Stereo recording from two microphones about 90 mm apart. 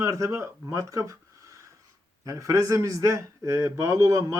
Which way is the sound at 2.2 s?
40° right (ahead or behind).